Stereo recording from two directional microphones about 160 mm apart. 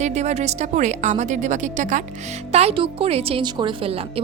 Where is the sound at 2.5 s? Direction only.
40° right (ahead or behind).